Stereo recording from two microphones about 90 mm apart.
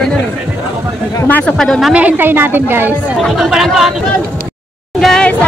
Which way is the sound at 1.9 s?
15° right (ahead or behind).